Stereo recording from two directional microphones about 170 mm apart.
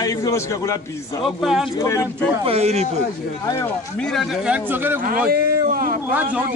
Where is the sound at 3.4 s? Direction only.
15° left (ahead or behind).